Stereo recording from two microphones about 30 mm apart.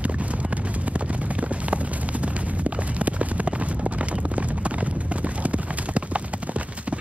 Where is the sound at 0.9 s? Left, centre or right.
Right.